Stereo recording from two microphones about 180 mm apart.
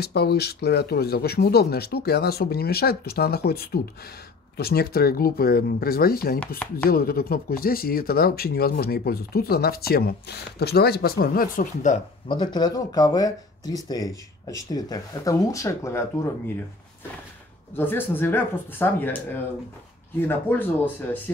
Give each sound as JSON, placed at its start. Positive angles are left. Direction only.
{"t": 0.0, "sound": "speech", "side_deg": 60}
{"t": 12.3, "sound": "speech", "side_deg": 25}
{"t": 17.7, "sound": "speech", "side_deg": 10}